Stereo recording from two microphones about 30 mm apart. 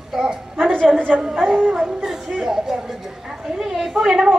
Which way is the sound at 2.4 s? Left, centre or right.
Centre.